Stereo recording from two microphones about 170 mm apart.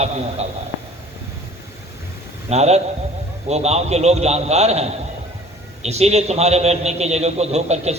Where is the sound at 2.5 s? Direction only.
40° right (ahead or behind).